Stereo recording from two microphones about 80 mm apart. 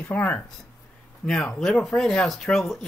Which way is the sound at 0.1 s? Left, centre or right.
Centre.